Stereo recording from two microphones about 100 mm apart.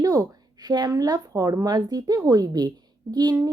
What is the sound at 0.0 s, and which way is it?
A woman's voice, 35° right (ahead or behind).